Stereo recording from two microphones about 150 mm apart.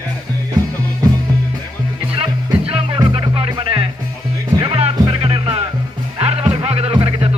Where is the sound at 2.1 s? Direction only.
40° right (ahead or behind).